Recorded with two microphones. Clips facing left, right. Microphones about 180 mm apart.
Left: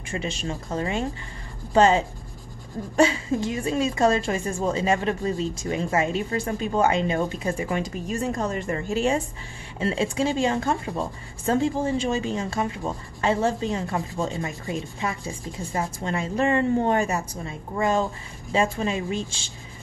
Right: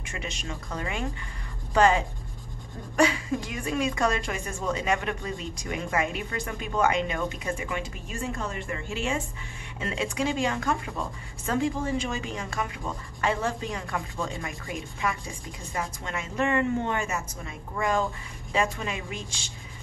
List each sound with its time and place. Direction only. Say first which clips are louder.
0.1 s speech: left 7 dB; 30° left (ahead or behind)